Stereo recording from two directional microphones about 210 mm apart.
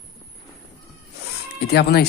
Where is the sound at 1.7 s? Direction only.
50° left (ahead or behind).